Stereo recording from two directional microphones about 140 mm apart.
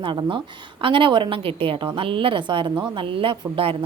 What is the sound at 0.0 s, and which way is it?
A woman's voice, 35° right (ahead or behind).